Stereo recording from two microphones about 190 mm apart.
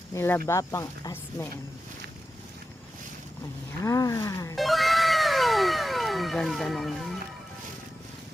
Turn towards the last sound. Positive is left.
turn(degrees=0)  # may be behind; listen again after turning